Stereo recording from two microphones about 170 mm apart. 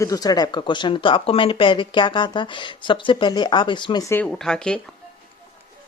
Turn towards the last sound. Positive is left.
turn(degrees=5)  # may be behind; listen again after turning